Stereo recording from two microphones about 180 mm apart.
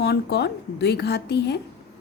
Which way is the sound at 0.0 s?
65° left (ahead or behind).